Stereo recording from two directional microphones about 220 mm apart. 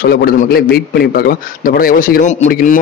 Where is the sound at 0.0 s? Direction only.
45° left (ahead or behind).